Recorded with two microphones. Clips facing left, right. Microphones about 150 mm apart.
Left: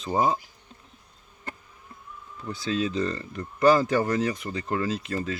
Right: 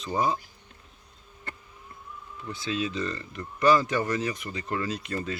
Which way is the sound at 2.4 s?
35° left (ahead or behind).